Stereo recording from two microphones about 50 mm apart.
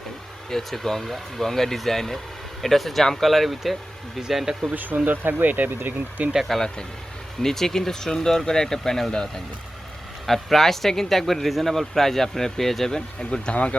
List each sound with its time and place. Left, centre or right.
0.5 s speech: centre
4.7 s speech: right
6.5 s speech: centre